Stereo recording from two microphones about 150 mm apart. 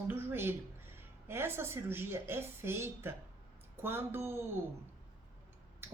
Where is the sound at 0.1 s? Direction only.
15° right (ahead or behind).